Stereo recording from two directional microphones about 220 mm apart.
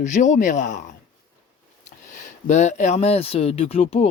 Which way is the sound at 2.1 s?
30° left (ahead or behind).